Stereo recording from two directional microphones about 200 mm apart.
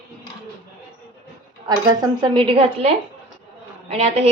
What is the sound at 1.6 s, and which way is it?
A woman's voice, 20° right (ahead or behind).